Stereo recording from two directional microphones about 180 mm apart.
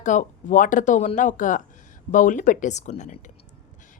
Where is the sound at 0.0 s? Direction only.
45° left (ahead or behind).